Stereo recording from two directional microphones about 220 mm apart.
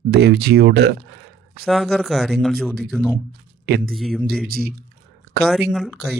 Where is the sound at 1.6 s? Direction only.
Centre (ahead or behind).